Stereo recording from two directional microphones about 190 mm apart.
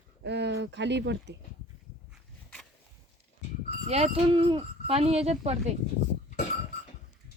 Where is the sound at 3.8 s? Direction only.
35° right (ahead or behind).